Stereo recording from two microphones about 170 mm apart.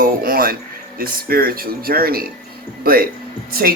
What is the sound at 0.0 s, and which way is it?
Speech, 55° right (ahead or behind).